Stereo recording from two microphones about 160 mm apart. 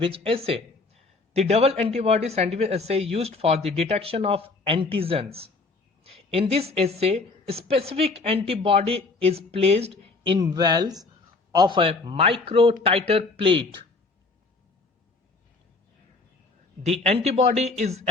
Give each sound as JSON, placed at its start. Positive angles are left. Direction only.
{"t": 0.0, "sound": "a woman's voice", "side_deg": -35}
{"t": 10.4, "sound": "speech", "side_deg": -25}
{"t": 16.8, "sound": "speech", "side_deg": -40}